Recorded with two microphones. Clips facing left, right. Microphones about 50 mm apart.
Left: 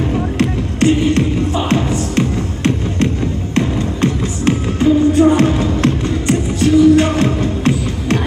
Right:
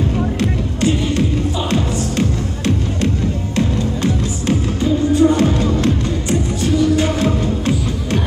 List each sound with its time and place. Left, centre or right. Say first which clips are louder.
0.4 s music: left 3 dB; left